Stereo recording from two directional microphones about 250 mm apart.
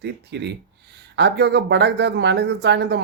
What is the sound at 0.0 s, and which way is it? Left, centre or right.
Speech, right.